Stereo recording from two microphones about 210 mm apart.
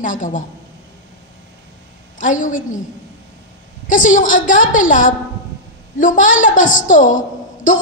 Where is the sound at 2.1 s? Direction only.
35° left (ahead or behind).